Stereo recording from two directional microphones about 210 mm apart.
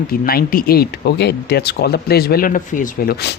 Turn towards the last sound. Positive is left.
turn(degrees=45)  # may be behind; listen again after turning